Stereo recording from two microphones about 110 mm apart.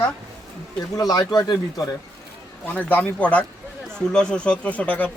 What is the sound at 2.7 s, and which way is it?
Speech, 15° left (ahead or behind).